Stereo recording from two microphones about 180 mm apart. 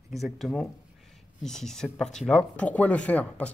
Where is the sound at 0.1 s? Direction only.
Centre (ahead or behind).